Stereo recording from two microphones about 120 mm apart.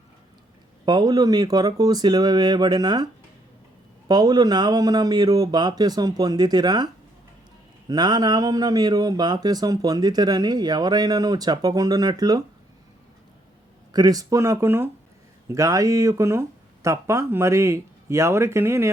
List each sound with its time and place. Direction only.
0.9 s speech: 35° right (ahead or behind)
4.1 s speech: 35° right (ahead or behind)
13.9 s speech: 30° right (ahead or behind)